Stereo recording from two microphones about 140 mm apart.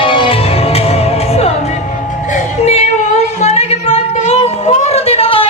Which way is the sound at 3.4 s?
50° left (ahead or behind).